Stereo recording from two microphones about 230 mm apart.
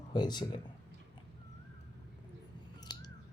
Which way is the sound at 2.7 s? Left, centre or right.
Centre.